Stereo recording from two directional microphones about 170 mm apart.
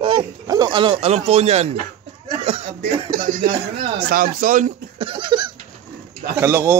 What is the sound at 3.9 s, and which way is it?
Speech, 60° right (ahead or behind).